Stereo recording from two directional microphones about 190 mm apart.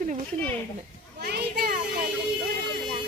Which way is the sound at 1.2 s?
60° right (ahead or behind).